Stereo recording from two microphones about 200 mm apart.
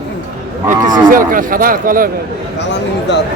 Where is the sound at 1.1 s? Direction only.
45° right (ahead or behind).